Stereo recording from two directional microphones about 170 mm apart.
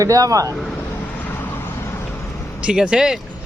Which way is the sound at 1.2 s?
10° left (ahead or behind).